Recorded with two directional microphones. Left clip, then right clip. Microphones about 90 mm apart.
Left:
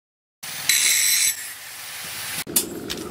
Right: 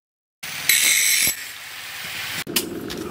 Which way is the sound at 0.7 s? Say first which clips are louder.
Right 2 dB; centre (ahead or behind).